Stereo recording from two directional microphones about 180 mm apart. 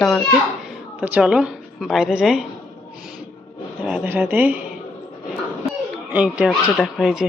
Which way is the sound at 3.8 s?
10° right (ahead or behind).